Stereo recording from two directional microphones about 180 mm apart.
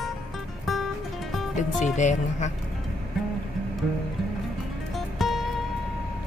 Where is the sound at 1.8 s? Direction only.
40° left (ahead or behind).